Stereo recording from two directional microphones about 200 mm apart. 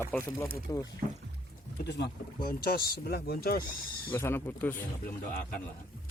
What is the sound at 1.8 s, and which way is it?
Speech, 55° left (ahead or behind).